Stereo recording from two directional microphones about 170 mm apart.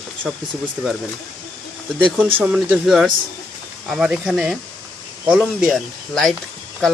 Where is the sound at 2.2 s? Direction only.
5° right (ahead or behind).